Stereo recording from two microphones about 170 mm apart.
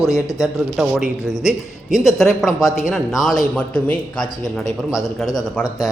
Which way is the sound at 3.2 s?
Centre (ahead or behind).